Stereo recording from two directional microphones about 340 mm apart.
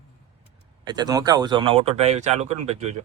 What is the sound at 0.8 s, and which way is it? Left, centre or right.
Speech, centre.